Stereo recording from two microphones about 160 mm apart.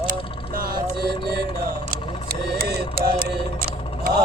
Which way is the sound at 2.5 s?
65° right (ahead or behind).